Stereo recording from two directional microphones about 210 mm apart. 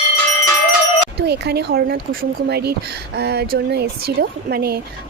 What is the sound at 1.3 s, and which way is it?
Speech, 50° right (ahead or behind).